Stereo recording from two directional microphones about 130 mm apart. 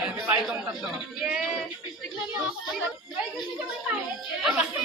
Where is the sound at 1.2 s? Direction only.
5° right (ahead or behind).